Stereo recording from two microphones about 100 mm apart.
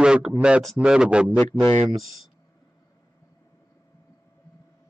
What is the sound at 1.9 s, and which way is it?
Speech, centre (ahead or behind).